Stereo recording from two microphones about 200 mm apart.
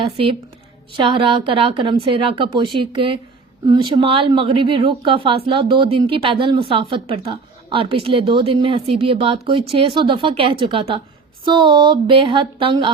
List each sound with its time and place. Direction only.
0.0 s speech: 25° right (ahead or behind)